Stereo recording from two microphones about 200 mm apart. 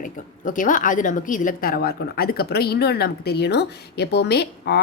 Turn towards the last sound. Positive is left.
turn(degrees=55)  # may be behind; listen again after turning